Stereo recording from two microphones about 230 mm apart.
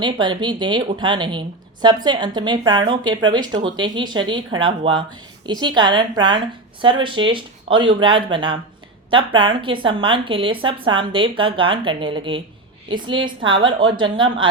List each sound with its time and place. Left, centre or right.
0.0 s a woman's voice: centre